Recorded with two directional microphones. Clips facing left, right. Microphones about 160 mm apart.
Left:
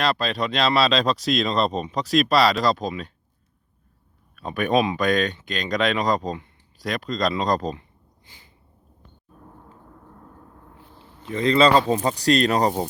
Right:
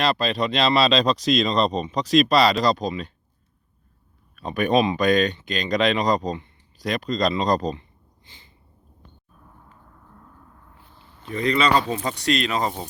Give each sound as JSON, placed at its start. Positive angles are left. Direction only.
{"t": 0.0, "sound": "speech", "side_deg": 0}
{"t": 4.4, "sound": "speech", "side_deg": 0}
{"t": 10.9, "sound": "speech", "side_deg": 20}